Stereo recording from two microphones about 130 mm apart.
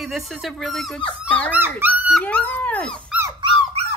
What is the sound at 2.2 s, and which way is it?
Dog, 15° left (ahead or behind).